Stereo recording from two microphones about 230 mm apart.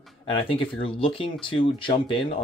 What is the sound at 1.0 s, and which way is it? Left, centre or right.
Speech, left.